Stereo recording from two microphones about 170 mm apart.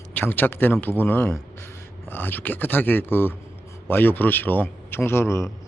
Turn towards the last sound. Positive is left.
turn(degrees=15)  # may be behind; listen again after turning